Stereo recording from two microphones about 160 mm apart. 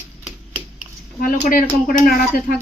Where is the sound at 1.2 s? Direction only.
60° left (ahead or behind).